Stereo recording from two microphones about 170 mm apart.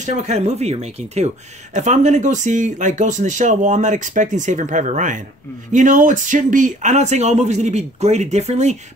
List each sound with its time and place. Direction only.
0.0 s speech: 40° right (ahead or behind)